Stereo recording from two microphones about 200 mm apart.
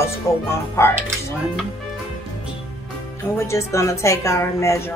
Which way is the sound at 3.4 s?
15° left (ahead or behind).